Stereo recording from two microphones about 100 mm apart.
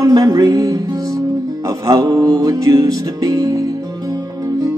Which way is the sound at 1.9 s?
40° right (ahead or behind).